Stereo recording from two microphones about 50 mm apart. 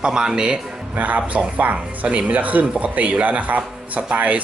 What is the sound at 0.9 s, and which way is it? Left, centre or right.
Speech, right.